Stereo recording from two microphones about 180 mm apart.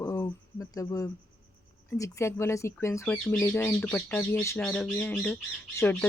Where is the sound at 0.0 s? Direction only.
15° left (ahead or behind).